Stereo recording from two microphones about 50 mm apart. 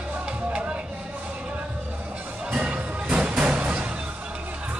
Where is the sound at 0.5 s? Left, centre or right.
Right.